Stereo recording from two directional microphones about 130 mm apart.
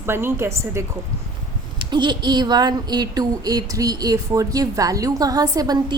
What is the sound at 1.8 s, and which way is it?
A woman's voice, 35° right (ahead or behind).